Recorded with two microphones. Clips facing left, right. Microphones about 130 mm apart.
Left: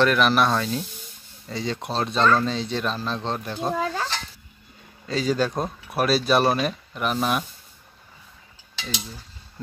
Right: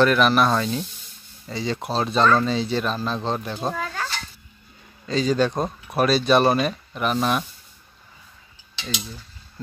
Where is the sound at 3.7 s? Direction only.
25° left (ahead or behind).